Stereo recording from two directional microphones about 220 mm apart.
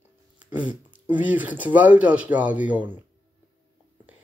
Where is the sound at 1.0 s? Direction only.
5° right (ahead or behind).